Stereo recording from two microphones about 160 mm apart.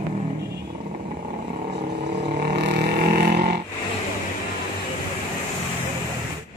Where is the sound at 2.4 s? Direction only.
90° right.